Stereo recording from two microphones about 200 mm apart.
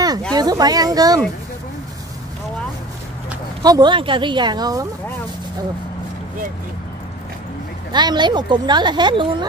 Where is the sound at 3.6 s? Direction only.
20° right (ahead or behind).